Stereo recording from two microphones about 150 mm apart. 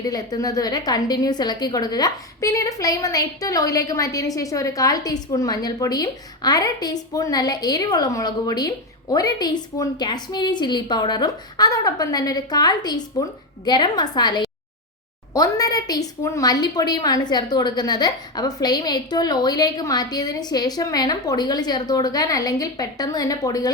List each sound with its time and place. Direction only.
0.0 s a woman's voice: 25° left (ahead or behind)